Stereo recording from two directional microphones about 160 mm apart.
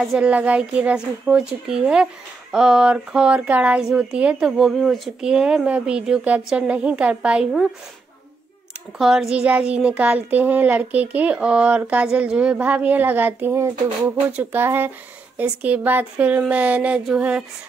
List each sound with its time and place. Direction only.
0.0 s speech: 5° right (ahead or behind)
8.9 s speech: centre (ahead or behind)